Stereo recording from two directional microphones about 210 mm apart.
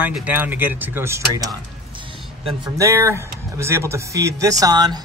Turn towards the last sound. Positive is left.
turn(degrees=-20)  # may be behind; listen again after turning